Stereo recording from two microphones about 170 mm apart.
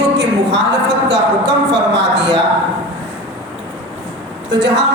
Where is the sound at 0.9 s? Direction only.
90° right.